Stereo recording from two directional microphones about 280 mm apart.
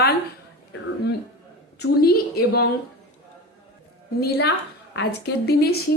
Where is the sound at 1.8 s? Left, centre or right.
Left.